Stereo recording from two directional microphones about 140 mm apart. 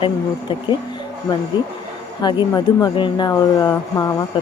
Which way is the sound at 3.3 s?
25° left (ahead or behind).